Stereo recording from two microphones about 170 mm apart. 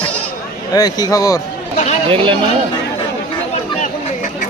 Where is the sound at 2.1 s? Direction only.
30° right (ahead or behind).